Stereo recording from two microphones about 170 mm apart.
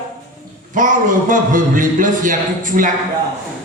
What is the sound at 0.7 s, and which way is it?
A man's voice, 50° right (ahead or behind).